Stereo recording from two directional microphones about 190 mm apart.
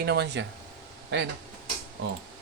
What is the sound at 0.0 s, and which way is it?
Speech, 60° right (ahead or behind).